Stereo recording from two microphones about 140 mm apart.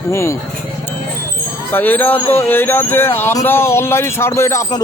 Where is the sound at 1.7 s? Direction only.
10° left (ahead or behind).